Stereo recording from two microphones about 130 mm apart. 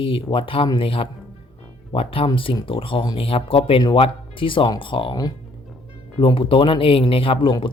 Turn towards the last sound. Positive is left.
turn(degrees=40)  # may be behind; listen again after turning